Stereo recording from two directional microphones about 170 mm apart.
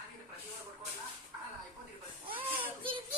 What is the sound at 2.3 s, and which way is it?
Baby cry, 30° right (ahead or behind).